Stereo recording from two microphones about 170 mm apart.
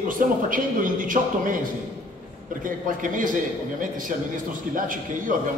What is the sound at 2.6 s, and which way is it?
A man's voice, 50° right (ahead or behind).